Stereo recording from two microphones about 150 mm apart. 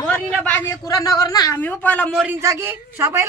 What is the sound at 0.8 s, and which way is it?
Speech, 25° left (ahead or behind).